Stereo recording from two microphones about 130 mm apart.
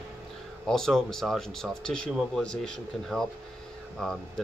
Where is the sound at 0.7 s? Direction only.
5° left (ahead or behind).